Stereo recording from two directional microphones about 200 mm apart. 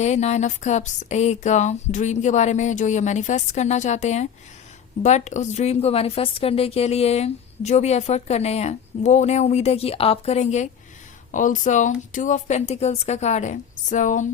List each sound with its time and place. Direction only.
0.0 s a woman's voice: 35° left (ahead or behind)